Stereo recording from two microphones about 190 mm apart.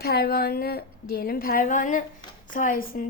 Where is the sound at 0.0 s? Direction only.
55° left (ahead or behind).